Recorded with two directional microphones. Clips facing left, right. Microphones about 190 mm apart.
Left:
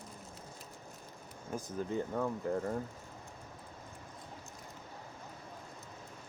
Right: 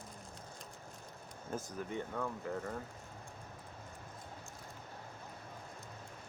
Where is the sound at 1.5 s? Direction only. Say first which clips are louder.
Left 1 dB; 10° left (ahead or behind).